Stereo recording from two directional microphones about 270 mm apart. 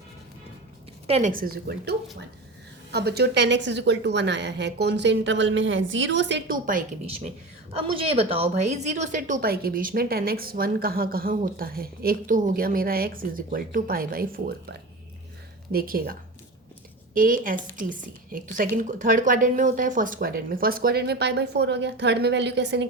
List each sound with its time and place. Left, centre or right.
1.0 s a woman's voice: right
17.2 s a woman's voice: right